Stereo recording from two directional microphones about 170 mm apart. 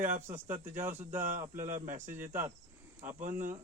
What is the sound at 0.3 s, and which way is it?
Speech, 15° right (ahead or behind).